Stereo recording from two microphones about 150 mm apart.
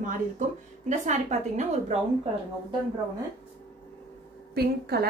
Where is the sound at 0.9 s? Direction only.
50° right (ahead or behind).